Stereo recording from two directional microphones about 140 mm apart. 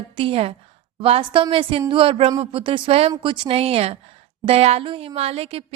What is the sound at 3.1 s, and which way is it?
A woman's voice, 35° right (ahead or behind).